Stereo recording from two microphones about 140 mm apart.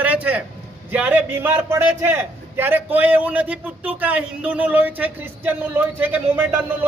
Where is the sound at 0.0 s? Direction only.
10° right (ahead or behind).